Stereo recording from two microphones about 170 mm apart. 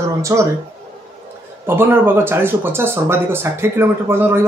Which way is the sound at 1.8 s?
15° right (ahead or behind).